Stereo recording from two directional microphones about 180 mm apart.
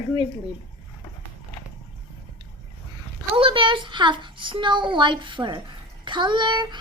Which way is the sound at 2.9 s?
30° right (ahead or behind).